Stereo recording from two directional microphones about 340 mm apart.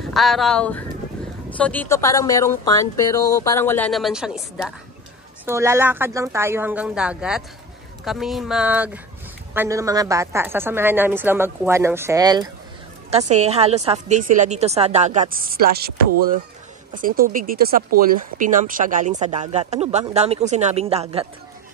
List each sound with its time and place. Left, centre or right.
0.1 s a woman's voice: centre